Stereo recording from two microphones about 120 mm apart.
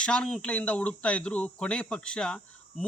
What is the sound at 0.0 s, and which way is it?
Speech, 5° left (ahead or behind).